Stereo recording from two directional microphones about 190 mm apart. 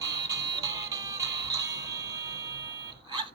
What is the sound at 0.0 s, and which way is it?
Music, 20° right (ahead or behind).